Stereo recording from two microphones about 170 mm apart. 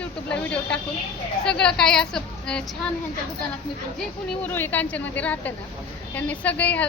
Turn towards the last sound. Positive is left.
turn(degrees=10)  # may be behind; listen again after turning